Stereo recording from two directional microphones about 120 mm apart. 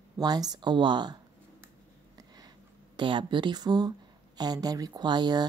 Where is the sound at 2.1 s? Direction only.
35° right (ahead or behind).